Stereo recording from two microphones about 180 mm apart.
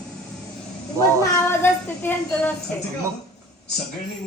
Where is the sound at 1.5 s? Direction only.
10° left (ahead or behind).